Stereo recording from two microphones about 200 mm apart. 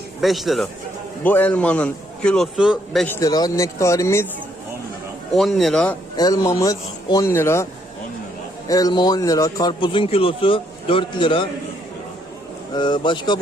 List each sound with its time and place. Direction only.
0.2 s a man's voice: centre (ahead or behind)
3.2 s a man's voice: 20° left (ahead or behind)
5.3 s speech: centre (ahead or behind)
6.1 s a man's voice: 20° left (ahead or behind)
12.7 s a man's voice: 20° left (ahead or behind)